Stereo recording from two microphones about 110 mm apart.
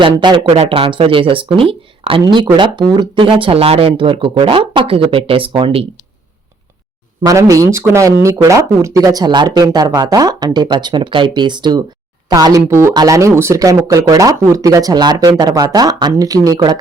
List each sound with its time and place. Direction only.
0.0 s speech: 40° right (ahead or behind)
0.4 s speech: 70° right (ahead or behind); by 5.8 s 50° right (ahead or behind)
7.2 s speech: 30° right (ahead or behind)